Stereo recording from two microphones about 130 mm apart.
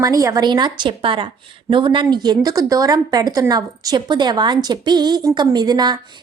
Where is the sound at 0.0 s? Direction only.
25° right (ahead or behind).